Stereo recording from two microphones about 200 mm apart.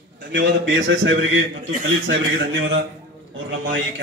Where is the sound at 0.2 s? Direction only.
65° right (ahead or behind).